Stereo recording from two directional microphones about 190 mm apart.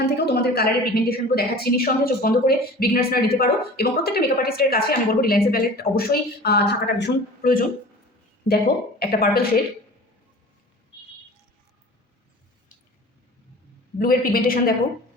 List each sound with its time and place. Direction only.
0.0 s a woman's voice: 55° left (ahead or behind)
14.0 s a woman's voice: 50° left (ahead or behind)